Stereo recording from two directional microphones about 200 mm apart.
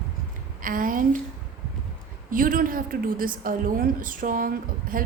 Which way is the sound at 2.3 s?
45° right (ahead or behind).